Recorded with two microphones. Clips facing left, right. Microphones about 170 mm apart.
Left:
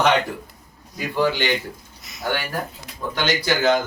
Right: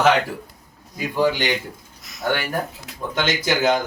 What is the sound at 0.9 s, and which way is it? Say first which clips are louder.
Speech: right 1 dB; 15° right (ahead or behind).